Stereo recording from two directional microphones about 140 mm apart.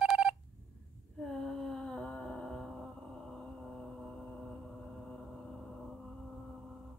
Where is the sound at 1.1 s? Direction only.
Centre (ahead or behind).